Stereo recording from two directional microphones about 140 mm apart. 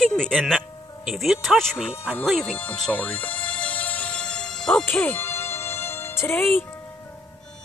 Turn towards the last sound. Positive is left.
turn(degrees=15)  # may be behind; listen again after turning